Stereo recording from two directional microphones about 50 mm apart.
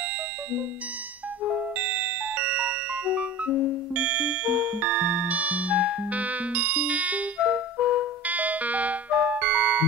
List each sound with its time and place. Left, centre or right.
1.4 s music: right
8.3 s music: right